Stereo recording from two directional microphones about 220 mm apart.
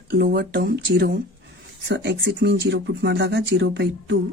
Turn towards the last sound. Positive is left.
turn(degrees=-50)  # may be behind; listen again after turning